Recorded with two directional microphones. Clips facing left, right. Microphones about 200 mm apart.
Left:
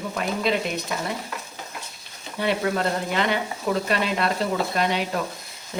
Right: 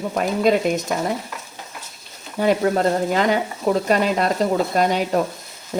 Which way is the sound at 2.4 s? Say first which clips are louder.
Right 6 dB; 45° right (ahead or behind).